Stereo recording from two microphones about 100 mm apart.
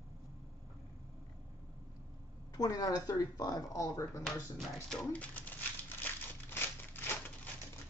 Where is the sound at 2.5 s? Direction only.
40° left (ahead or behind).